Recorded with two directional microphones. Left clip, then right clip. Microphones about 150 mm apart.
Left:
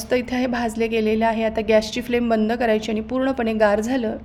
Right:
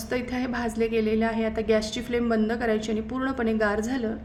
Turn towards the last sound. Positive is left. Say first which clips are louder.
# left 7 dB
turn(degrees=15)  # may be behind; listen again after turning